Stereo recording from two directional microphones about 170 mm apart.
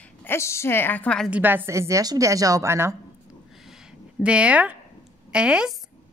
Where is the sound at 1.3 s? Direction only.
10° right (ahead or behind).